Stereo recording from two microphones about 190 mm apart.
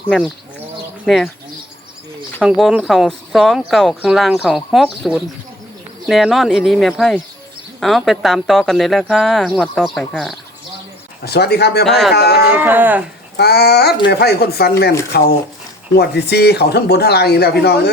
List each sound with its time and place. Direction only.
1.0 s speech: centre (ahead or behind)
2.4 s speech: 5° right (ahead or behind)
11.2 s speech: 55° left (ahead or behind)
11.9 s speech: centre (ahead or behind)
12.1 s speech: 55° left (ahead or behind)
12.5 s speech: 10° right (ahead or behind)
13.3 s speech: 60° left (ahead or behind)
16.0 s speech: 60° left (ahead or behind)